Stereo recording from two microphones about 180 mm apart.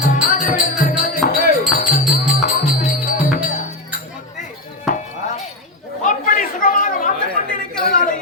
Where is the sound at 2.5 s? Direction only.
45° left (ahead or behind).